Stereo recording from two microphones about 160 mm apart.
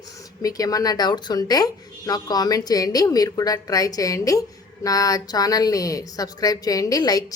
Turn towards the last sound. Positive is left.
turn(degrees=25)  # may be behind; listen again after turning